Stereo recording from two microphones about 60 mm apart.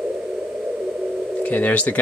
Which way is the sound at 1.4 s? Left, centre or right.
Left.